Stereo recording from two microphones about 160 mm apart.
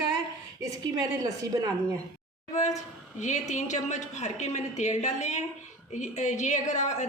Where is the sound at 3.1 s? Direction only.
50° left (ahead or behind).